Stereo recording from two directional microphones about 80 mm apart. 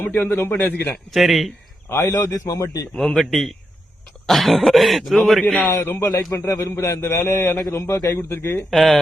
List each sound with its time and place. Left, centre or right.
0.0 s a man's voice: left
1.1 s speech: centre
1.9 s a man's voice: left
3.2 s speech: centre
5.6 s a man's voice: left
8.7 s speech: centre